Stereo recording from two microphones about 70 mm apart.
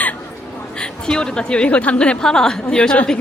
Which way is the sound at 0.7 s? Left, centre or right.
Centre.